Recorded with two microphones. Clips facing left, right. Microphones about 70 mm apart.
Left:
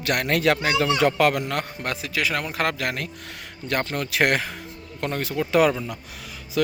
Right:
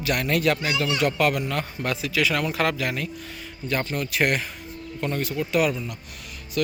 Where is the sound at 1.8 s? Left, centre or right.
Left.